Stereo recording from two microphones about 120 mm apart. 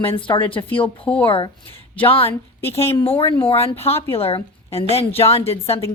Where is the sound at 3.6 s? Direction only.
55° left (ahead or behind).